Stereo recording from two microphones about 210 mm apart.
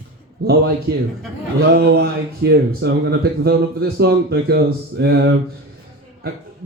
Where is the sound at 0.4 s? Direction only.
50° right (ahead or behind).